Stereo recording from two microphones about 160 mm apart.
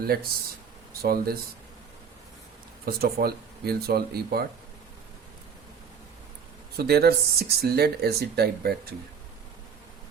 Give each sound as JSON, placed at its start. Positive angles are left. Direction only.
{"t": 0.0, "sound": "speech", "side_deg": -70}
{"t": 2.8, "sound": "speech", "side_deg": -70}
{"t": 6.7, "sound": "speech", "side_deg": -85}